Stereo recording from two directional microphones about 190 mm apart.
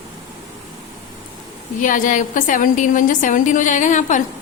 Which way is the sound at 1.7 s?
45° left (ahead or behind).